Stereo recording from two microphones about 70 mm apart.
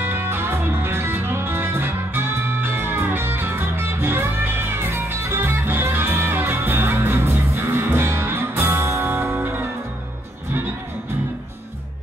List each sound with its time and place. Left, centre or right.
0.0 s music: right